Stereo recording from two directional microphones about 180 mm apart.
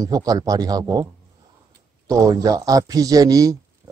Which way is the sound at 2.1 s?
20° right (ahead or behind).